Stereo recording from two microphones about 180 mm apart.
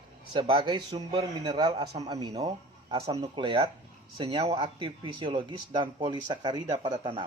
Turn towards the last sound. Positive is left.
turn(degrees=-30)  # may be behind; listen again after turning